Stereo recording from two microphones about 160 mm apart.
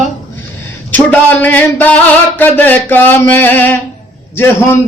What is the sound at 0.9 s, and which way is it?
A man's voice, 10° left (ahead or behind).